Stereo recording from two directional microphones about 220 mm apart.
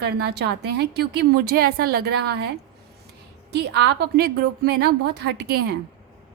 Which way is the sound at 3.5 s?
50° right (ahead or behind).